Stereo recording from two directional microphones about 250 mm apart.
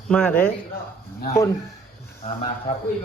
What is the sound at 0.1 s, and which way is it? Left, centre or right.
Speech, centre.